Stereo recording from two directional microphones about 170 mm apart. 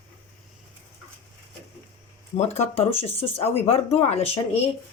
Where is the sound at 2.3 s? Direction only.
40° left (ahead or behind).